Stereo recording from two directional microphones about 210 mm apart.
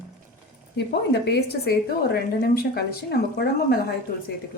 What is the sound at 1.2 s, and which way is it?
Speech, 50° left (ahead or behind).